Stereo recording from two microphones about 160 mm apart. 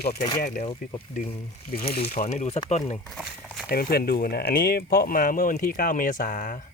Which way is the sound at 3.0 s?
Centre (ahead or behind).